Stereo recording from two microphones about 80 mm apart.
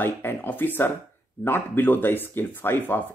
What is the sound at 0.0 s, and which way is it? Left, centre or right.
Speech, left.